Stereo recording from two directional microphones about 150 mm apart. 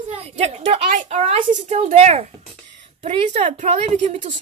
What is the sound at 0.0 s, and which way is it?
A woman's voice, 45° right (ahead or behind).